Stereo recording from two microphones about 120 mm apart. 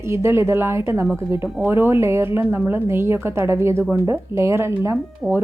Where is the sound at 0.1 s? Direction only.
20° right (ahead or behind).